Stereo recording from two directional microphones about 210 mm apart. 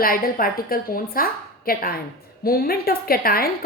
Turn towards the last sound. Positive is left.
turn(degrees=45)  # may be behind; listen again after turning